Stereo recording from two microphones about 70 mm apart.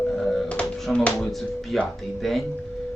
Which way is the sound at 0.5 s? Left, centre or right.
Centre.